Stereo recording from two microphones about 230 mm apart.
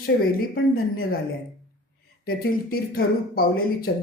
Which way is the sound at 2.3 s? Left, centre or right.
Left.